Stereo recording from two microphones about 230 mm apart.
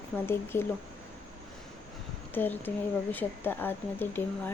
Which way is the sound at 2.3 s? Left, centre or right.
Centre.